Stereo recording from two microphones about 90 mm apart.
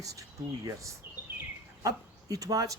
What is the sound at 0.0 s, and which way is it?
Speech, 40° right (ahead or behind).